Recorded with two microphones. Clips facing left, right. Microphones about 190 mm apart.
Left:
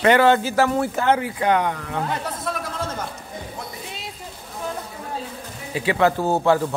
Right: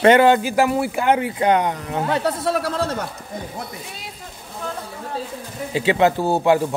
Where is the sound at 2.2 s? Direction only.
70° right (ahead or behind).